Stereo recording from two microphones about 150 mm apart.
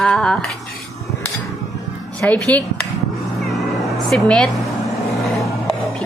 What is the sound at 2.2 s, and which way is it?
Speech, 10° left (ahead or behind).